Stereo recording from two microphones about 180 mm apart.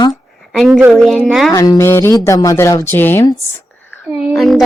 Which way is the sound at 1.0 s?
Centre (ahead or behind).